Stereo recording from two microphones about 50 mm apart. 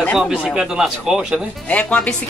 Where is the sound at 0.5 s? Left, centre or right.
Centre.